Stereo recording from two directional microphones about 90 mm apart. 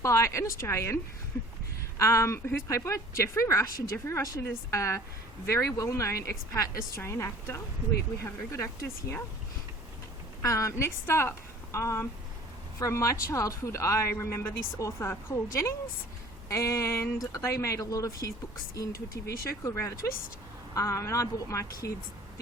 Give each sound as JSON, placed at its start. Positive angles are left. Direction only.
{"t": 0.0, "sound": "a woman's voice", "side_deg": 35}
{"t": 10.4, "sound": "a woman's voice", "side_deg": 35}